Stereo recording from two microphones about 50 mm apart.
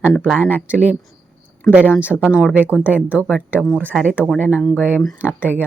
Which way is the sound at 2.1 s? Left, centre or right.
Centre.